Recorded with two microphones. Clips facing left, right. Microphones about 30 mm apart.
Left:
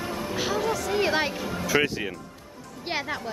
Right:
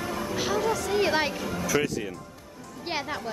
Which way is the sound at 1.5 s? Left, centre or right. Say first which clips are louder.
Left 3 dB; left.